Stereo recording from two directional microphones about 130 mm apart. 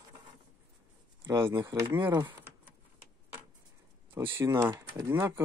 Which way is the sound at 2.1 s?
35° right (ahead or behind).